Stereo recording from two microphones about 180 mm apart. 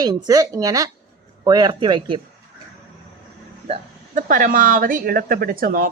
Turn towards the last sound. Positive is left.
turn(degrees=-55)  # may be behind; listen again after turning